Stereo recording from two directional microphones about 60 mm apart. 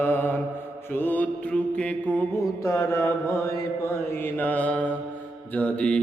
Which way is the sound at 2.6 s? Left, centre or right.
Left.